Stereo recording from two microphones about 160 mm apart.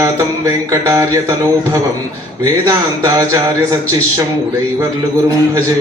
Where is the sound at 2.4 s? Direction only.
20° right (ahead or behind).